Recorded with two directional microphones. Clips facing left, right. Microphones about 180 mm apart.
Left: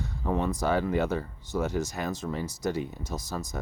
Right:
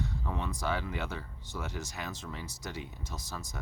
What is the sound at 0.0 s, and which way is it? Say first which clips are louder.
Speech: left 7 dB; 45° left (ahead or behind).